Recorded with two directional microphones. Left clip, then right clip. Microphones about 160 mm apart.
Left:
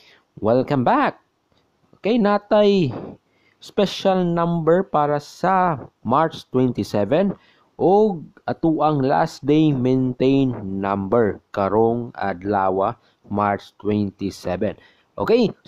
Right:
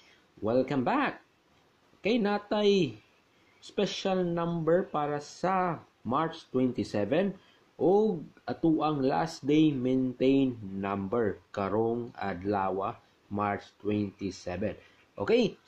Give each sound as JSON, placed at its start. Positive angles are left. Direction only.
{"t": 0.4, "sound": "speech", "side_deg": 50}